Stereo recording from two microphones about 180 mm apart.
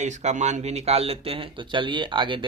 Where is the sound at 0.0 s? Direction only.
40° right (ahead or behind).